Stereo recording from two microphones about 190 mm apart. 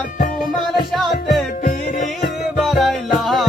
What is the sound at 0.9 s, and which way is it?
Music, centre (ahead or behind).